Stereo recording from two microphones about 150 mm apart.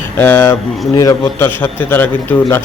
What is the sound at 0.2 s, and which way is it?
A man's voice, 15° left (ahead or behind).